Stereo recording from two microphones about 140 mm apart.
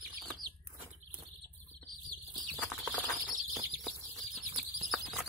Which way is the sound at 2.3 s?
10° left (ahead or behind).